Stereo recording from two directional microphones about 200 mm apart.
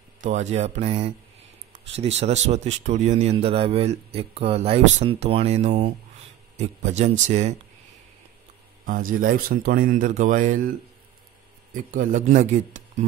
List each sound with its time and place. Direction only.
0.2 s speech: 35° right (ahead or behind)
8.8 s speech: 45° right (ahead or behind)
11.7 s speech: 40° right (ahead or behind)